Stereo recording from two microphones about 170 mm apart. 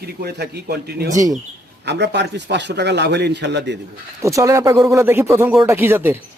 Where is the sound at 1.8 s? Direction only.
90° right.